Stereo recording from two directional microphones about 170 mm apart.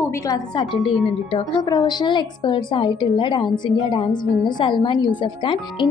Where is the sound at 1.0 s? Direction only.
30° left (ahead or behind).